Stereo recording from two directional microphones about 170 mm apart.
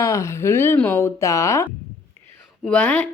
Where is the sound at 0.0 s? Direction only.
15° left (ahead or behind).